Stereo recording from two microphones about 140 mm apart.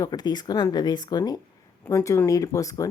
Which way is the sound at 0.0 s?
30° left (ahead or behind).